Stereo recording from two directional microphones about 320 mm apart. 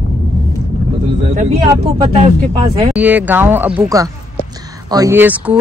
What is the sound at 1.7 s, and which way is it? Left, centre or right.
Speech, centre.